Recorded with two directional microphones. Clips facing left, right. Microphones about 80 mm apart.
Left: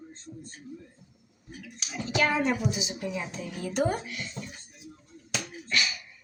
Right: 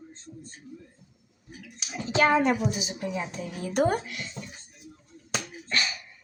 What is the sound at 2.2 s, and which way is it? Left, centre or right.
A woman's voice, right.